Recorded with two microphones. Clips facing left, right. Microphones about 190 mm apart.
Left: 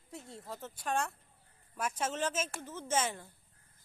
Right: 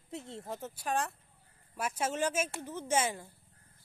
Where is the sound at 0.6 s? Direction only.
5° right (ahead or behind).